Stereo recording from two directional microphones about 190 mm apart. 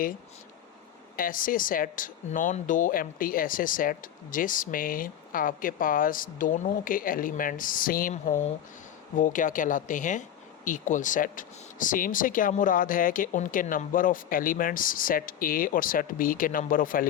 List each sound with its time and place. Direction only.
1.1 s speech: 45° left (ahead or behind)